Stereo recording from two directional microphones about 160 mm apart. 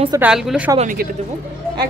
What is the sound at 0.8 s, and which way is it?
Speech, 55° right (ahead or behind).